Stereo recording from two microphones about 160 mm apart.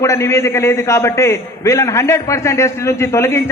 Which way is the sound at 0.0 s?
15° left (ahead or behind).